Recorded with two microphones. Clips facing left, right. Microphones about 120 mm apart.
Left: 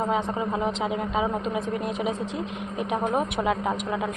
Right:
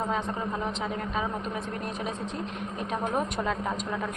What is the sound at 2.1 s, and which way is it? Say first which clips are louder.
Speech: left 4 dB; 90° left.